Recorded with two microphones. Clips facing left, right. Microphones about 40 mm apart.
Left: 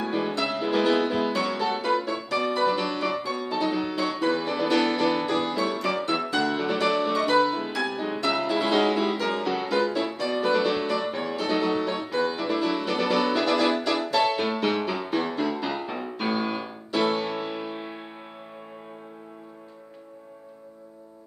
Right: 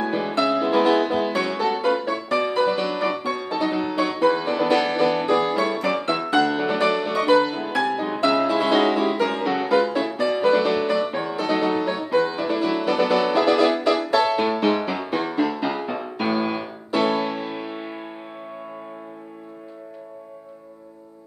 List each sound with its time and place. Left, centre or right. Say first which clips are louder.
0.0 s music: right 5 dB; centre